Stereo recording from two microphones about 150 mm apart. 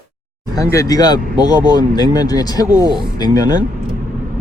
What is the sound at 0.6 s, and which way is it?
Speech, 20° left (ahead or behind).